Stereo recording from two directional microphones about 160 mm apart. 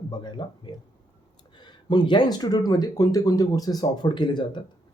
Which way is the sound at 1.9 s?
25° left (ahead or behind).